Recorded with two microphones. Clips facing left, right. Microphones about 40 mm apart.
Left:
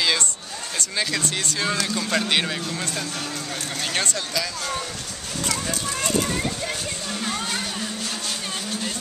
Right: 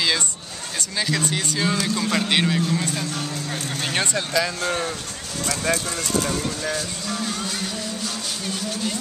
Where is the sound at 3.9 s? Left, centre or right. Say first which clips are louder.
Right 4 dB; centre.